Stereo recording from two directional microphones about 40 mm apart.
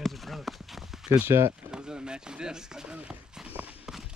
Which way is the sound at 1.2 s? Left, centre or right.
Right.